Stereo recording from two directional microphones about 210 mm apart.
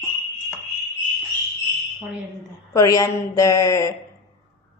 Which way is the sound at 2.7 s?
15° left (ahead or behind).